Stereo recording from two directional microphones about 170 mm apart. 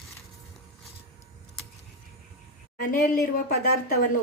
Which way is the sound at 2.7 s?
55° left (ahead or behind).